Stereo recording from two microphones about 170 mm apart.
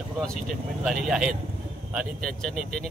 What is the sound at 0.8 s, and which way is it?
A man's voice, centre (ahead or behind).